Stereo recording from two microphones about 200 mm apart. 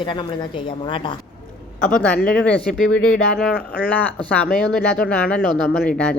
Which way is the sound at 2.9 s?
90° left.